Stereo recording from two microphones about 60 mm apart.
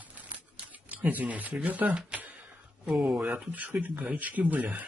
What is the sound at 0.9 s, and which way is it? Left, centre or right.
Speech, right.